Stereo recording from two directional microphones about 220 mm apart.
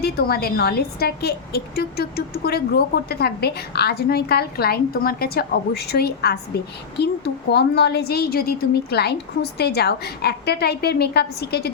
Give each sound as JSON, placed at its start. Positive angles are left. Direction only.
{"t": 0.0, "sound": "a woman's voice", "side_deg": 45}
{"t": 7.5, "sound": "a woman's voice", "side_deg": 45}